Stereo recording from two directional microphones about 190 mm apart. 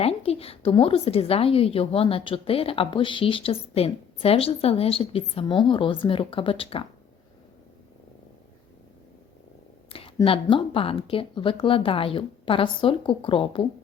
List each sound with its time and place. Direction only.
0.0 s a woman's voice: 30° left (ahead or behind)
10.2 s a woman's voice: 25° left (ahead or behind)